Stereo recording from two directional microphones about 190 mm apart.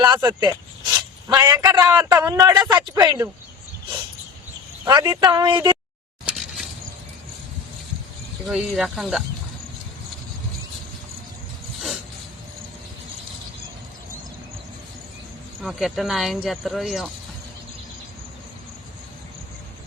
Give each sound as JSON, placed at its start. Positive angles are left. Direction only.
{"t": 0.2, "sound": "a man's voice", "side_deg": -15}
{"t": 4.9, "sound": "a man's voice", "side_deg": -20}
{"t": 6.2, "sound": "a sound", "side_deg": 0}
{"t": 8.4, "sound": "speech", "side_deg": 0}
{"t": 15.6, "sound": "speech", "side_deg": 0}